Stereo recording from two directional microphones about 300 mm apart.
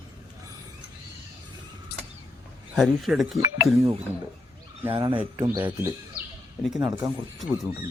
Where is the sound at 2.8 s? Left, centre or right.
Centre.